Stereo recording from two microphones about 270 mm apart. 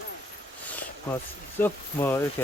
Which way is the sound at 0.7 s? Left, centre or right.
Centre.